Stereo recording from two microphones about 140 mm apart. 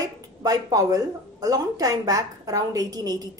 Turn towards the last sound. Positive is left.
turn(degrees=-25)  # may be behind; listen again after turning